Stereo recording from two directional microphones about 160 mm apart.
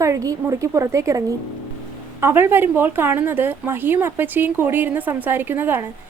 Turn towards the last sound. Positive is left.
turn(degrees=-10)  # may be behind; listen again after turning